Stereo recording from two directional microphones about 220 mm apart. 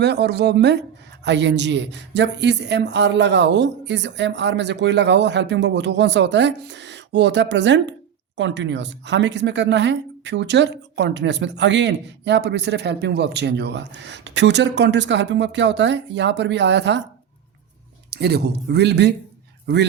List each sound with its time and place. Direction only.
0.0 s a woman's voice: 50° right (ahead or behind)
18.1 s a woman's voice: 50° right (ahead or behind)